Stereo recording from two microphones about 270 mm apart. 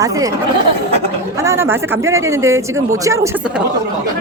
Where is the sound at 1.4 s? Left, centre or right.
Centre.